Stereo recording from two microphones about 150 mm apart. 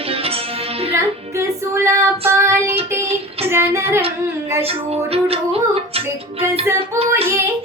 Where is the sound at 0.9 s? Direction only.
15° right (ahead or behind).